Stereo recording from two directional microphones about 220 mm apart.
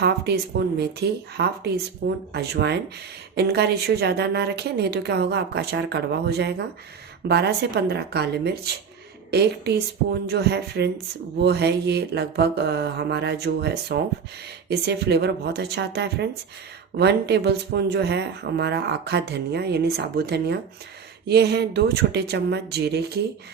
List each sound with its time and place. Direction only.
0.8 s speech: 50° right (ahead or behind)